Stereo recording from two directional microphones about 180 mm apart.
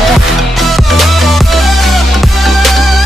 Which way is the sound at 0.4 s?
Centre (ahead or behind).